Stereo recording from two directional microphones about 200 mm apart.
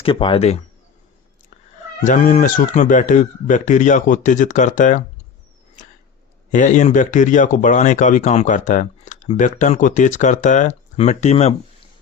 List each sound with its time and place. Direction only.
0.0 s speech: 25° left (ahead or behind)
2.0 s speech: 40° left (ahead or behind)
6.5 s speech: 40° left (ahead or behind)